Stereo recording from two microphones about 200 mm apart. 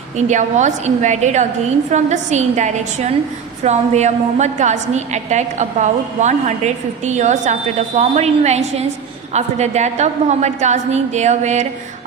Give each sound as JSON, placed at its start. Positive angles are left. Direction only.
{"t": 0.2, "sound": "a woman's voice", "side_deg": -35}